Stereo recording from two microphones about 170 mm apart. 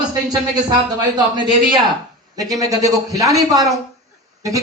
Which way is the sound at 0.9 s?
25° right (ahead or behind).